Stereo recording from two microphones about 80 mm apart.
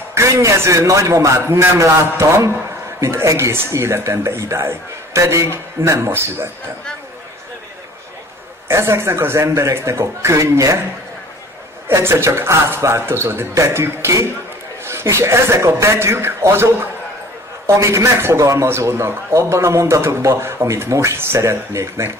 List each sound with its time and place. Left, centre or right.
0.1 s a man's voice: right
8.6 s a man's voice: right
11.9 s a man's voice: right